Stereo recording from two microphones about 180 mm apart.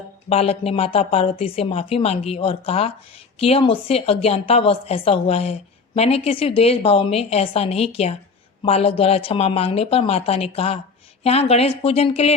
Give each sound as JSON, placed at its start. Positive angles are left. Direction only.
{"t": 0.3, "sound": "a woman's voice", "side_deg": 35}